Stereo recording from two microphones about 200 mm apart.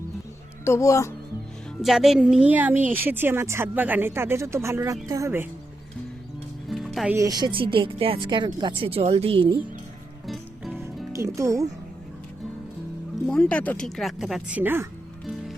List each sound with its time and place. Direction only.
0.6 s speech: 15° left (ahead or behind)
1.8 s speech: centre (ahead or behind)
6.7 s music: centre (ahead or behind)
7.2 s speech: 20° right (ahead or behind)
10.2 s music: centre (ahead or behind)
10.8 s music: 15° right (ahead or behind)
13.2 s speech: 5° left (ahead or behind)